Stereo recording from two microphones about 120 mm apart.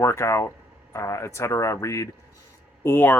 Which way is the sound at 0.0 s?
20° left (ahead or behind).